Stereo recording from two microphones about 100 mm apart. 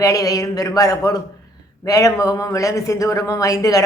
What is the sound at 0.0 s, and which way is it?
A man's voice, 35° left (ahead or behind).